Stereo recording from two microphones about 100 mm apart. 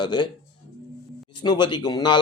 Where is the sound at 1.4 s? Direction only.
45° left (ahead or behind).